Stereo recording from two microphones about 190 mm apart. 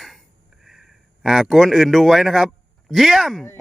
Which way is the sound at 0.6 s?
Centre (ahead or behind).